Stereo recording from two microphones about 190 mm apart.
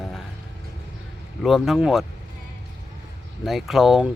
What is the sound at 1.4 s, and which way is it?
Speech, centre (ahead or behind).